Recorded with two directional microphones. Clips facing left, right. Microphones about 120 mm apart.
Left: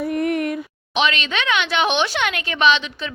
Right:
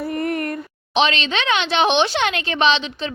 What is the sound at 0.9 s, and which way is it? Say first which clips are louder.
Speech: right 2 dB; 30° right (ahead or behind).